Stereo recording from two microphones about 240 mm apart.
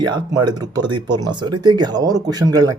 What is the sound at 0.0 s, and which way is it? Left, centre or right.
Speech, centre.